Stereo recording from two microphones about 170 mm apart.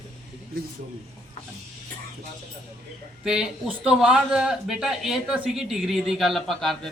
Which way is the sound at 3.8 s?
5° right (ahead or behind).